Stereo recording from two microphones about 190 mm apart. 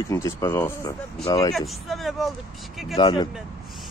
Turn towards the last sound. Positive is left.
turn(degrees=25)  # may be behind; listen again after turning